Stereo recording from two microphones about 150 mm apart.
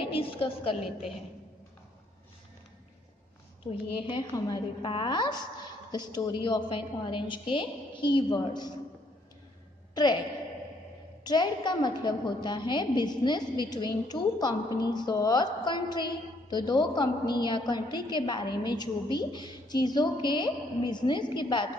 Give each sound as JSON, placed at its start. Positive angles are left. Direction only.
{"t": 0.0, "sound": "a sound", "side_deg": 35}
{"t": 3.9, "sound": "a woman's voice", "side_deg": 30}
{"t": 10.0, "sound": "a woman's voice", "side_deg": 30}
{"t": 11.2, "sound": "a woman's voice", "side_deg": 30}